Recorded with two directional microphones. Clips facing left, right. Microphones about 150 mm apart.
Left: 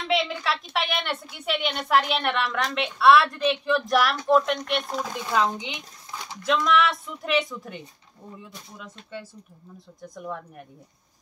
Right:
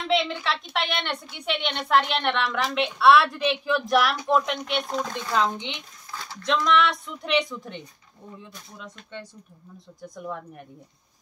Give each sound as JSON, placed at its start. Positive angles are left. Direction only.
{"t": 0.0, "sound": "a woman's voice", "side_deg": 0}
{"t": 6.1, "sound": "a sound", "side_deg": 20}
{"t": 6.4, "sound": "a woman's voice", "side_deg": 5}